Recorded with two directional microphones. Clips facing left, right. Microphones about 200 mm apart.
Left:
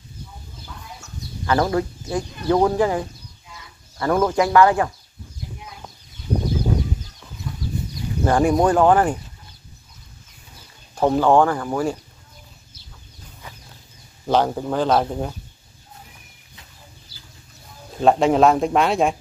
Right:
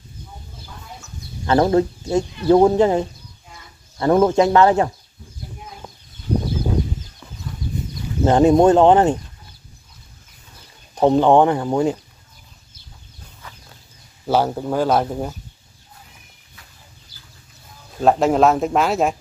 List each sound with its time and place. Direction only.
1.4 s speech: 25° right (ahead or behind)
8.2 s speech: 20° right (ahead or behind)
11.0 s speech: 20° right (ahead or behind)
14.2 s speech: 5° right (ahead or behind)
18.0 s speech: centre (ahead or behind)